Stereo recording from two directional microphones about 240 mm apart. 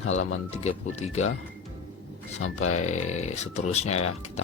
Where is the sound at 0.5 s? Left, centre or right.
Left.